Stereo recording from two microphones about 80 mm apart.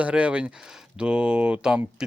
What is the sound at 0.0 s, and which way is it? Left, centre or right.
Speech, centre.